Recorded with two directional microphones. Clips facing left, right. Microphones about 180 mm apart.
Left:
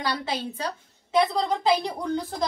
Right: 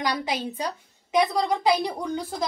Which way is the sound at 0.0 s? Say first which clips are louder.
Right 2 dB; 15° right (ahead or behind).